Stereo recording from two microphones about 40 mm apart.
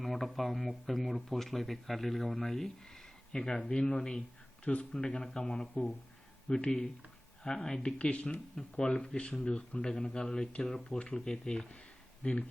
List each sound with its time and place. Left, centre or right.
0.0 s speech: centre; by 4.9 s left
4.9 s speech: centre
7.9 s speech: left
12.2 s speech: left